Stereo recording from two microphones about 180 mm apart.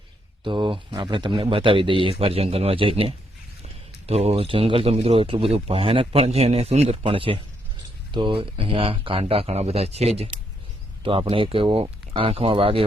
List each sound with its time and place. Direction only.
0.4 s speech: 25° right (ahead or behind)